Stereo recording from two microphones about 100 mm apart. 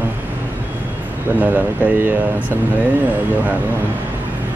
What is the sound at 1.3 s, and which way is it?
Speech, 15° right (ahead or behind).